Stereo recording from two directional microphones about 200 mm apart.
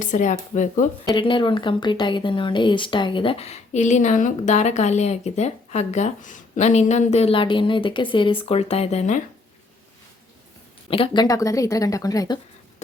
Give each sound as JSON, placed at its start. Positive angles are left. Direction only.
{"t": 0.0, "sound": "speech", "side_deg": 40}
{"t": 1.1, "sound": "speech", "side_deg": 25}
{"t": 10.8, "sound": "speech", "side_deg": 25}